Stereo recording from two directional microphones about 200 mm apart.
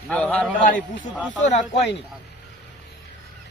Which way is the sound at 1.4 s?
35° left (ahead or behind).